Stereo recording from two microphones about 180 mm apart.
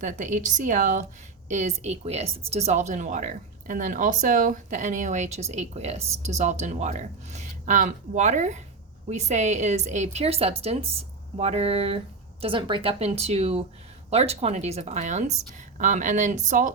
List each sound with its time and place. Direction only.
0.0 s a woman's voice: 45° right (ahead or behind)